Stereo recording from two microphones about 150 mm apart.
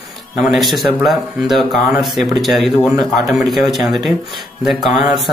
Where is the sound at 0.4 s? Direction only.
Centre (ahead or behind).